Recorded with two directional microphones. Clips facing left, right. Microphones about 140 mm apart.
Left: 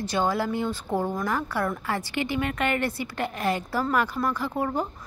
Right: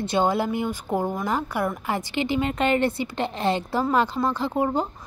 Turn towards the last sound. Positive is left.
turn(degrees=-20)  # may be behind; listen again after turning